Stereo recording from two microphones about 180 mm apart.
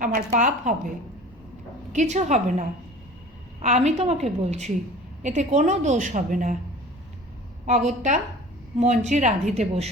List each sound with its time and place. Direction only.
0.0 s a woman's voice: 45° right (ahead or behind)
1.9 s a woman's voice: 40° right (ahead or behind)
7.7 s a woman's voice: 40° right (ahead or behind)